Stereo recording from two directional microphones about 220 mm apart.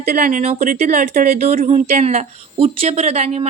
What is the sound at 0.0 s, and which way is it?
Speech, 35° right (ahead or behind).